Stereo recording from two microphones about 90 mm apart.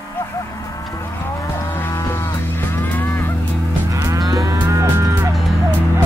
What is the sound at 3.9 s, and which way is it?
Moo, 40° right (ahead or behind).